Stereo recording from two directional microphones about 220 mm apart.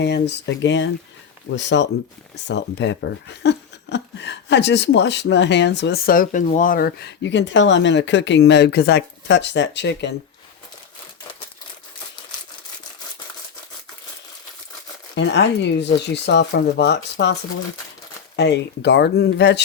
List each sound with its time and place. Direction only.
0.0 s speech: 50° left (ahead or behind)
15.1 s speech: 50° left (ahead or behind)
18.3 s speech: 50° left (ahead or behind)